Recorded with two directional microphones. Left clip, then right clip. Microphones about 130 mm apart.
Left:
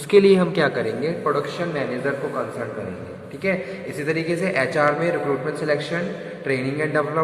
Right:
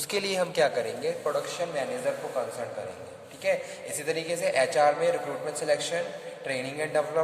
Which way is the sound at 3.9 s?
90° right.